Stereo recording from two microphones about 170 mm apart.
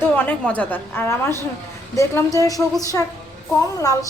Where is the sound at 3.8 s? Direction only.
20° left (ahead or behind).